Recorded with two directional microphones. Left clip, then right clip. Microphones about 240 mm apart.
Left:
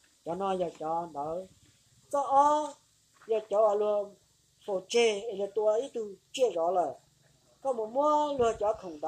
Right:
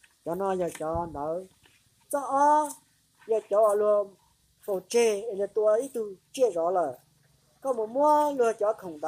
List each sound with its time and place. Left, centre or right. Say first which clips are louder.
0.2 s speech: right 3 dB; right